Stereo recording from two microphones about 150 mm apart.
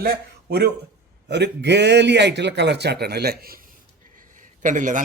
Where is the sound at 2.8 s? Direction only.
90° right.